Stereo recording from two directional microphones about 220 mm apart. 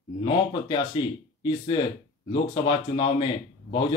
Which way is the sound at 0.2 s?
25° left (ahead or behind).